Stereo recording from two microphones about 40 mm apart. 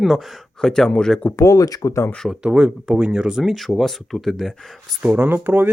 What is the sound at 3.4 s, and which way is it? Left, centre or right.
Speech, centre.